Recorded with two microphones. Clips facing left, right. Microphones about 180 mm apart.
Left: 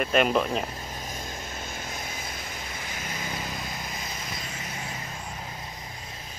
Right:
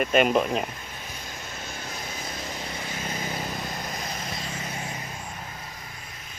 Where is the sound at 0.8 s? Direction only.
40° left (ahead or behind).